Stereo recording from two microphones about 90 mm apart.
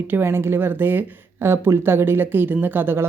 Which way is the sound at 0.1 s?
25° right (ahead or behind).